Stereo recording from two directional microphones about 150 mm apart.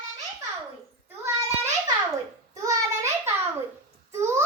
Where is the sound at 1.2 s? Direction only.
20° right (ahead or behind).